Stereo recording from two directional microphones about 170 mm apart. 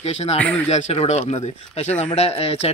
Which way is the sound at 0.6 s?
40° left (ahead or behind).